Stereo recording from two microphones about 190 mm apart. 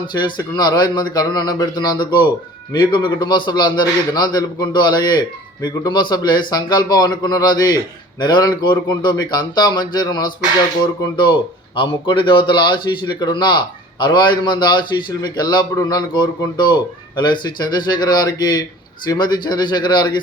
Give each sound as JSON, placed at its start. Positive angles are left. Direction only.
{"t": 0.1, "sound": "speech", "side_deg": 25}